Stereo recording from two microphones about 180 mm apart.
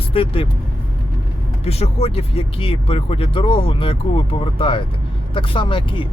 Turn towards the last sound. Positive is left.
turn(degrees=25)  # may be behind; listen again after turning